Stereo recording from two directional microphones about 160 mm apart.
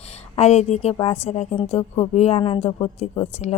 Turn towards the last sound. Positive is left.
turn(degrees=45)  # may be behind; listen again after turning